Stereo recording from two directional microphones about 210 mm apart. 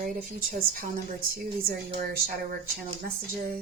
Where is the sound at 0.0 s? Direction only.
40° right (ahead or behind).